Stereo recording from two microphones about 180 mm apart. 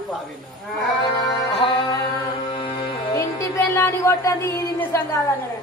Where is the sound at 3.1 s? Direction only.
15° left (ahead or behind).